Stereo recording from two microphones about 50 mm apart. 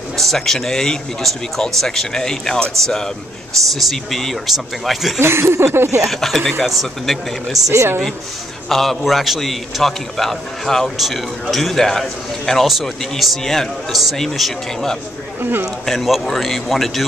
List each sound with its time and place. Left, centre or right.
0.2 s a man's voice: centre
5.2 s speech: right
6.0 s a man's voice: centre
7.6 s speech: right
8.6 s a man's voice: centre